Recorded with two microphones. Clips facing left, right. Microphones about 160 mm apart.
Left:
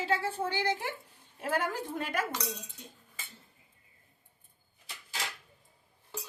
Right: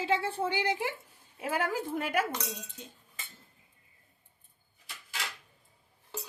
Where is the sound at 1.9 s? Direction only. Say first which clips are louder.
Right 3 dB; 10° right (ahead or behind).